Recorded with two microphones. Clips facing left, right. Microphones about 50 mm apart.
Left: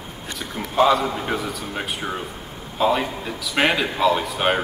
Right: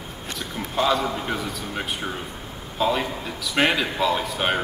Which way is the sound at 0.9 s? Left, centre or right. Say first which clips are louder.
Left 3 dB; centre.